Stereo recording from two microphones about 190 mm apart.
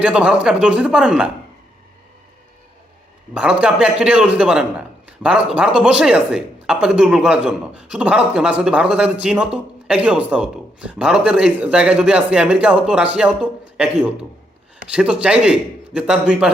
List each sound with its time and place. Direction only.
0.0 s speech: 5° right (ahead or behind)
3.3 s speech: 5° right (ahead or behind)